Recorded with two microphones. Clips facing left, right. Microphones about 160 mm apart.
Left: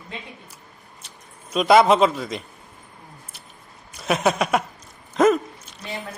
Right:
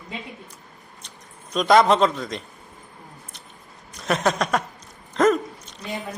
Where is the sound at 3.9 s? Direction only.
5° left (ahead or behind).